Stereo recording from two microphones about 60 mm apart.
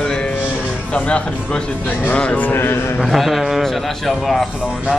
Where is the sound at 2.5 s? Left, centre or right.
Left.